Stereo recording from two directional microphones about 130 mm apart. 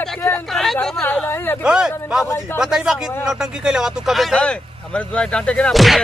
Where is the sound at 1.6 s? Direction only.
5° right (ahead or behind).